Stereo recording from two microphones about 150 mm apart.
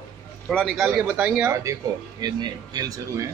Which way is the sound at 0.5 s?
5° left (ahead or behind).